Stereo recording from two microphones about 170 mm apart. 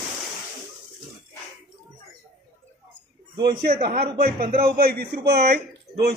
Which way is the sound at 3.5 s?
60° right (ahead or behind).